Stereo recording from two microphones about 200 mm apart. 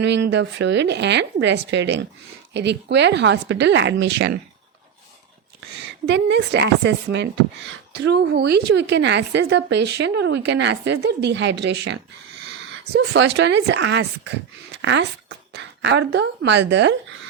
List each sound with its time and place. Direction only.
0.0 s a woman's voice: 60° right (ahead or behind)
6.1 s a woman's voice: 60° right (ahead or behind)
14.7 s a sound: 65° right (ahead or behind)
15.5 s speech: 65° right (ahead or behind)